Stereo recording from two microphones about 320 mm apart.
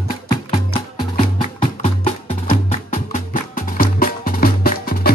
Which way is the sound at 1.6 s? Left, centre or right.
Centre.